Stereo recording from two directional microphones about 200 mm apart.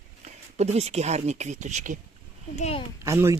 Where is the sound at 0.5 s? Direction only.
35° right (ahead or behind).